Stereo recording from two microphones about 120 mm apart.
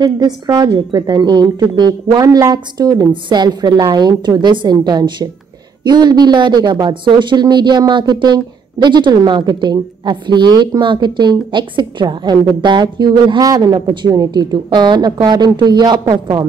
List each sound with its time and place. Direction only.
0.0 s speech: 35° right (ahead or behind)